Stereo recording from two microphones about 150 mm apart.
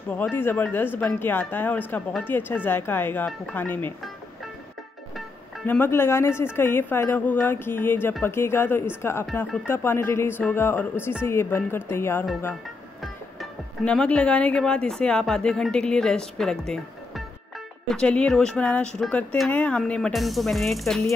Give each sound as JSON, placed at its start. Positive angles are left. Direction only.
{"t": 0.1, "sound": "speech", "side_deg": 10}
{"t": 5.7, "sound": "speech", "side_deg": 15}
{"t": 13.0, "sound": "speech", "side_deg": 0}